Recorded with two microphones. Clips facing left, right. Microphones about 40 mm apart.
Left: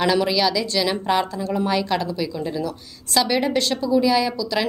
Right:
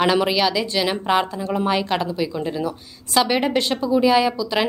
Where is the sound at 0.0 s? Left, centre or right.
Right.